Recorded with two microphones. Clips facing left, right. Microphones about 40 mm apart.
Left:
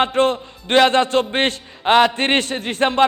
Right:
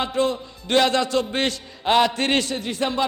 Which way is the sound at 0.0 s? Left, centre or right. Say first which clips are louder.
Left 5 dB; left.